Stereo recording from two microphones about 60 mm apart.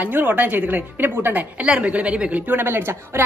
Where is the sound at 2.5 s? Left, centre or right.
Right.